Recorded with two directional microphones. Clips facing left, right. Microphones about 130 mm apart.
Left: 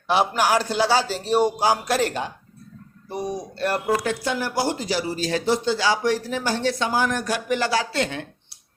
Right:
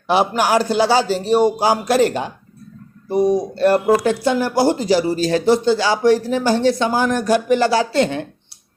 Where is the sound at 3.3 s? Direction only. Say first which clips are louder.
Right 9 dB; 30° right (ahead or behind).